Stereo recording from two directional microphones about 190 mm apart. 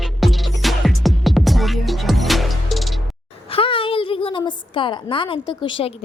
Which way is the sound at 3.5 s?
30° left (ahead or behind).